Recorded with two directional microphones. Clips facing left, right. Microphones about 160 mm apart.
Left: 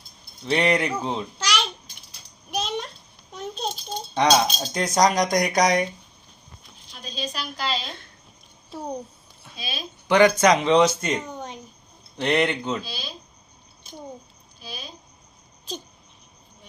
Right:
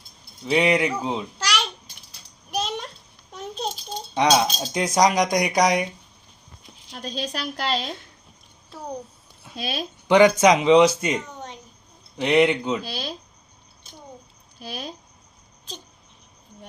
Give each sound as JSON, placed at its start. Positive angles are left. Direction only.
{"t": 0.4, "sound": "speech", "side_deg": -5}
{"t": 2.6, "sound": "a sound", "side_deg": -10}
{"t": 3.3, "sound": "speech", "side_deg": -10}
{"t": 6.9, "sound": "a woman's voice", "side_deg": -65}
{"t": 9.6, "sound": "a woman's voice", "side_deg": -65}
{"t": 10.1, "sound": "speech", "side_deg": -15}
{"t": 11.3, "sound": "a sound", "side_deg": 10}
{"t": 12.1, "sound": "speech", "side_deg": -5}
{"t": 12.8, "sound": "speech", "side_deg": -70}
{"t": 14.6, "sound": "speech", "side_deg": -70}